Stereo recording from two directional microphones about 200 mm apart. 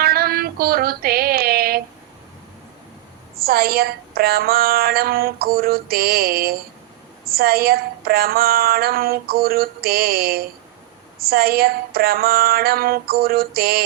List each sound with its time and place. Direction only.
0.0 s female singing: 50° right (ahead or behind)
3.3 s a woman's voice: 50° right (ahead or behind)